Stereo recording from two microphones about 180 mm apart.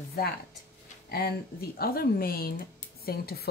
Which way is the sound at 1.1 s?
60° left (ahead or behind).